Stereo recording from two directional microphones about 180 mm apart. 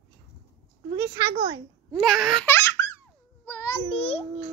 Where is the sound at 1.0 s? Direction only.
20° right (ahead or behind).